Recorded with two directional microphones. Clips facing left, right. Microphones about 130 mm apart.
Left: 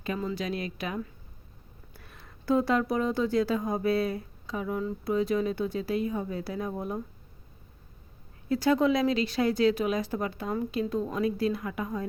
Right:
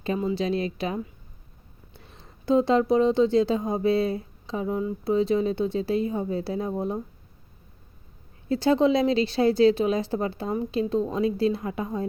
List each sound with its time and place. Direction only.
0.0 s speech: 30° right (ahead or behind)
8.4 s speech: 25° right (ahead or behind)